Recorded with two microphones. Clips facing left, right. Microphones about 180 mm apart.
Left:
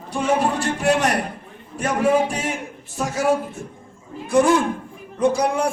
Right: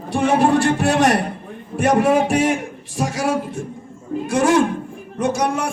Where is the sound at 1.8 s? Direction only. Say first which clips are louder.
Right 3 dB; 85° right.